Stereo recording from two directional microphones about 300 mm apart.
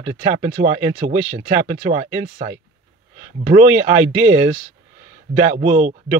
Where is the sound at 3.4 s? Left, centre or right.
Right.